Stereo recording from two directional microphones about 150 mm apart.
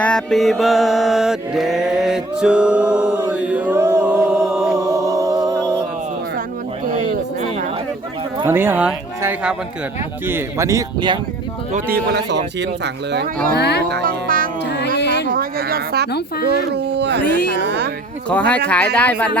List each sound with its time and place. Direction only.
0.0 s mantra: 5° left (ahead or behind); by 4.0 s 15° right (ahead or behind)
4.0 s music: 5° right (ahead or behind)
4.8 s music: 20° right (ahead or behind)
8.4 s speech: 15° right (ahead or behind)
10.2 s speech: 15° right (ahead or behind)
13.6 s speech: 90° left
14.0 s music: 70° right (ahead or behind); by 16.0 s 90° right
18.3 s speech: 10° left (ahead or behind)